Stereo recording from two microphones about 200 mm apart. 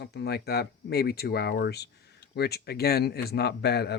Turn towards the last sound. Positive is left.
turn(degrees=55)  # may be behind; listen again after turning